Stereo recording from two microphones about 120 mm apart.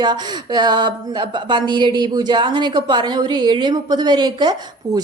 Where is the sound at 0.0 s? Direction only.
35° right (ahead or behind).